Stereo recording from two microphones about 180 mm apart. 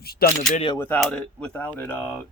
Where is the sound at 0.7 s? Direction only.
10° left (ahead or behind).